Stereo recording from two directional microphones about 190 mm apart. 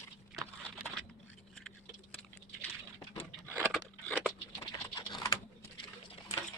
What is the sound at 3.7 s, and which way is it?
Scissors, 5° left (ahead or behind).